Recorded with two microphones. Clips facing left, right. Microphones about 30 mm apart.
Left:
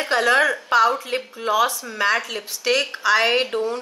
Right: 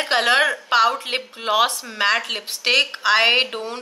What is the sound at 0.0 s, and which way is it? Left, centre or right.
Speech, right.